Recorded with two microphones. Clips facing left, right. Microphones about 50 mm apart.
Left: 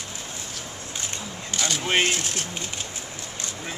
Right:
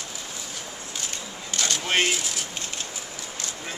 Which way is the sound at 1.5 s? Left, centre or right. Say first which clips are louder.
Left 1 dB; centre.